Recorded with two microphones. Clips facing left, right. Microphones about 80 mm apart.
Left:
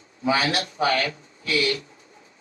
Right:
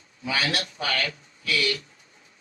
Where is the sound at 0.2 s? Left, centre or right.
Left.